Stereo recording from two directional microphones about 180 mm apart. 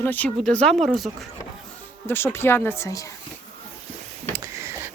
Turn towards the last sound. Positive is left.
turn(degrees=-15)  # may be behind; listen again after turning